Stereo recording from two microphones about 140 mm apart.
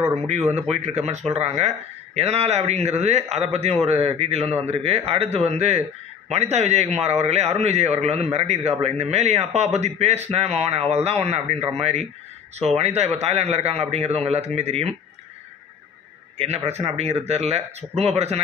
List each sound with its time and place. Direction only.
0.5 s a man's voice: 50° right (ahead or behind)
16.3 s a man's voice: 50° right (ahead or behind)